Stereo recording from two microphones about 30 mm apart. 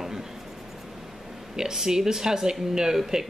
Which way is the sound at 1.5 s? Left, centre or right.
Centre.